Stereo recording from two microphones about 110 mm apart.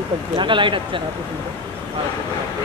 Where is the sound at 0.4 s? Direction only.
45° right (ahead or behind).